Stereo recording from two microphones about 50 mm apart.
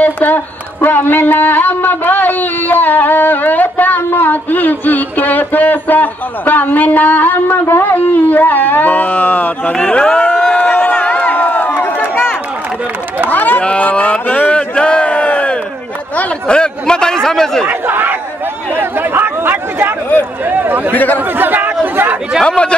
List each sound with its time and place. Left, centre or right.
0.0 s music: left
0.7 s speech: left
9.8 s a sound: left
13.3 s a sound: left
16.4 s chatter: centre
17.6 s a sound: right
20.9 s speech: left
21.4 s chatter: right
22.4 s speech: centre